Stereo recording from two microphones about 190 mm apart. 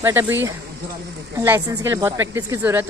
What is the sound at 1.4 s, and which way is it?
A woman's voice, 15° right (ahead or behind).